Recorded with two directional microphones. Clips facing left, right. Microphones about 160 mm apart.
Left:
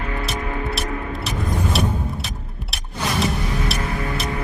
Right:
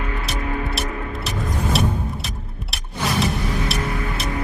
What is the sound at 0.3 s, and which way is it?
Music, centre (ahead or behind).